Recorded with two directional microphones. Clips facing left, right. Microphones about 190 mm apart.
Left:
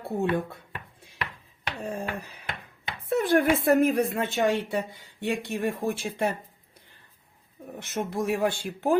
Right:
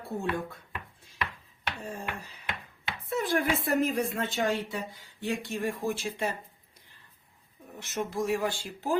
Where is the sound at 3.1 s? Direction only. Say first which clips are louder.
Left 6 dB; 55° left (ahead or behind).